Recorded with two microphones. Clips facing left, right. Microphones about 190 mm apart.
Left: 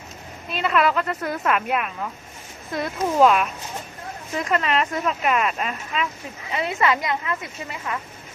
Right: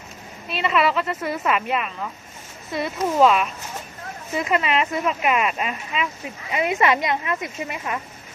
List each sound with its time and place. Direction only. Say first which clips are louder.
0.5 s a woman's voice: even; centre (ahead or behind); by 7.9 s 20° right (ahead or behind)